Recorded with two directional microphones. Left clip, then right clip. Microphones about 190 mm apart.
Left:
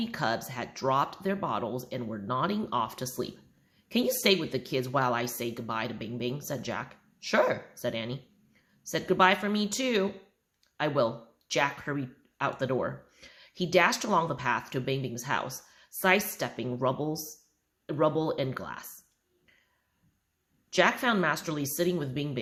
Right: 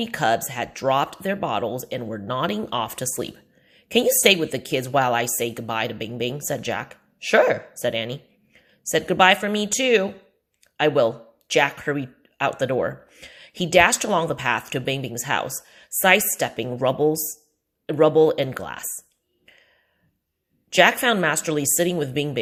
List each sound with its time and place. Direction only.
0.0 s speech: 25° right (ahead or behind)
20.7 s speech: 30° right (ahead or behind)